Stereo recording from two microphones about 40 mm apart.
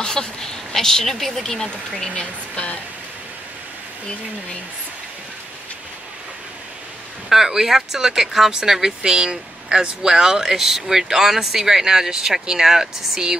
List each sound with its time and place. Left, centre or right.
0.0 s speech: centre
2.1 s speech: left
7.2 s speech: centre
9.1 s speech: right